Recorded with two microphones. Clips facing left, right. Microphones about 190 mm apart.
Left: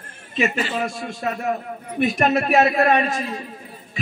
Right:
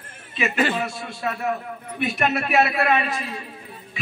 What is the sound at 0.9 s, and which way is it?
A man's voice, 45° left (ahead or behind).